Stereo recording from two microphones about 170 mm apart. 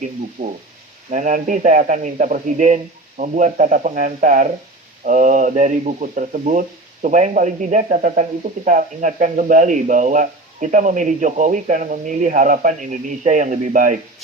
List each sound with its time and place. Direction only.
0.4 s speech: 50° right (ahead or behind)